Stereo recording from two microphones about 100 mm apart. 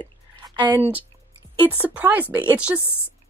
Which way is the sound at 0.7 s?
20° right (ahead or behind).